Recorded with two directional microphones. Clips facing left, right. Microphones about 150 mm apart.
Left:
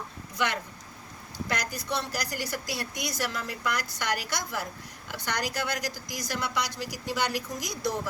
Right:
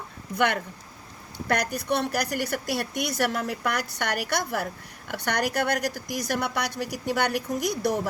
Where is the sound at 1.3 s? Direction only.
60° right (ahead or behind).